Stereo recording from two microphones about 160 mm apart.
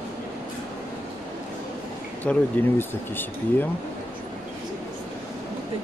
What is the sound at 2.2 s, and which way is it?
Speech, 5° left (ahead or behind).